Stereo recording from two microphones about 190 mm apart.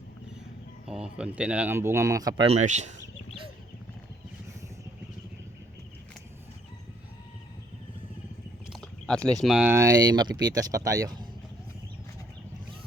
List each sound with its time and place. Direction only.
0.9 s speech: 5° right (ahead or behind)
2.5 s speech: 35° right (ahead or behind)
8.7 s speech: 5° left (ahead or behind); by 11.3 s 20° right (ahead or behind)